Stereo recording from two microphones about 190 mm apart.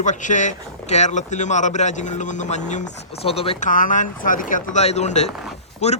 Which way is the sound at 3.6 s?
45° left (ahead or behind).